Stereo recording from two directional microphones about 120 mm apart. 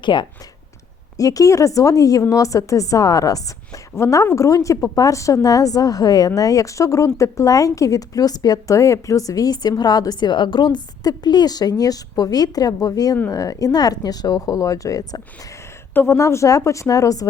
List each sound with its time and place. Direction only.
0.0 s speech: 40° left (ahead or behind)
1.1 s a woman's voice: 30° left (ahead or behind)